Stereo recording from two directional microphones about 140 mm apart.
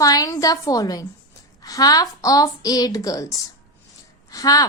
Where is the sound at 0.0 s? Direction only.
25° left (ahead or behind).